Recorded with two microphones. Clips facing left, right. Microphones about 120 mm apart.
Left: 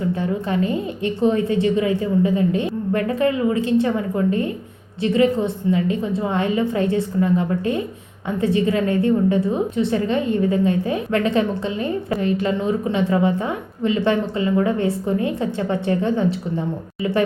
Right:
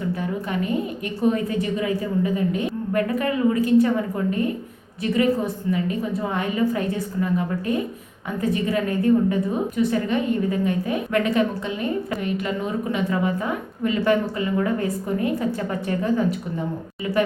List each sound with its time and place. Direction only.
0.1 s a woman's voice: 30° left (ahead or behind)
5.1 s a woman's voice: 25° left (ahead or behind)